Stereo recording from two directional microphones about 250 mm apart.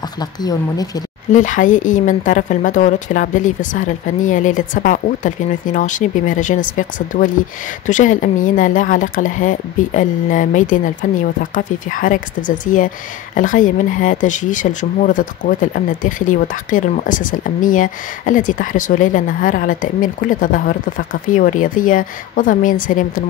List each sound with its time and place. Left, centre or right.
0.2 s speech: centre
1.3 s speech: left